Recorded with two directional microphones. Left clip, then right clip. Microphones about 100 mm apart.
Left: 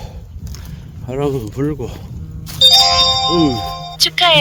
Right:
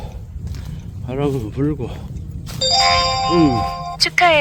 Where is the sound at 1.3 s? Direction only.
55° left (ahead or behind).